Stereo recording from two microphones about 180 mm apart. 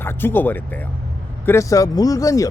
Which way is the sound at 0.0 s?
10° left (ahead or behind).